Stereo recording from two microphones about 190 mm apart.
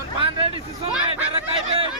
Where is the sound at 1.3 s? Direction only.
30° right (ahead or behind).